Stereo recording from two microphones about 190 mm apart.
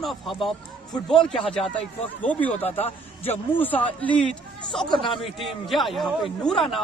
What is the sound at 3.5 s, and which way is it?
A man's voice, 10° left (ahead or behind).